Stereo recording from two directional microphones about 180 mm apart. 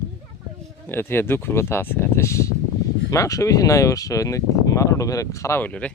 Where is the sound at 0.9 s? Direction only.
10° left (ahead or behind).